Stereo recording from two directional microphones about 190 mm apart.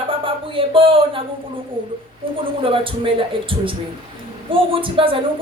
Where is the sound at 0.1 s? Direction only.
30° right (ahead or behind).